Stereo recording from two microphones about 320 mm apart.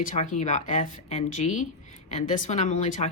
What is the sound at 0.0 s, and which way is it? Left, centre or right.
Speech, left.